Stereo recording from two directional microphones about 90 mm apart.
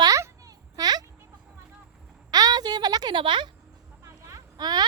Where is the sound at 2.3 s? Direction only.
45° right (ahead or behind); by 3.5 s 65° right (ahead or behind).